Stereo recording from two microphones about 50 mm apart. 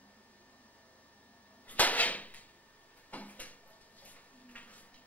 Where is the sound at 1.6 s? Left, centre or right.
Left.